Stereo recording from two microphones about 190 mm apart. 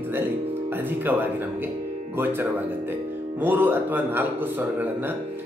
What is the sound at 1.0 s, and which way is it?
Speech, 10° right (ahead or behind).